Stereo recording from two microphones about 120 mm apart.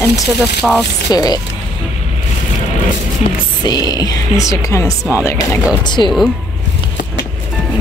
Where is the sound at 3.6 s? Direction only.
35° left (ahead or behind).